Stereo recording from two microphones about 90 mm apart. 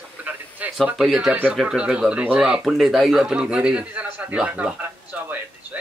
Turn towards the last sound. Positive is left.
turn(degrees=-10)  # may be behind; listen again after turning